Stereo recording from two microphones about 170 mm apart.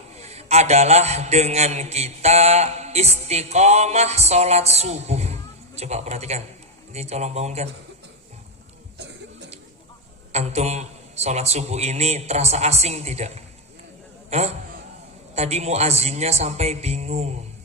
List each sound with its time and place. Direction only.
0.1 s a man's voice: 40° right (ahead or behind)
10.3 s a man's voice: 40° right (ahead or behind)